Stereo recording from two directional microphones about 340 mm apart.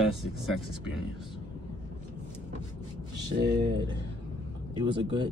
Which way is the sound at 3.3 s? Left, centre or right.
Right.